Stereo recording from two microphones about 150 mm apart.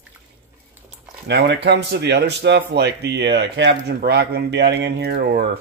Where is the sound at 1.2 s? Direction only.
90° right.